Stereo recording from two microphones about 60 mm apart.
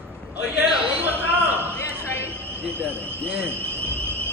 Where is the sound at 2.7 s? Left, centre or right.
Right.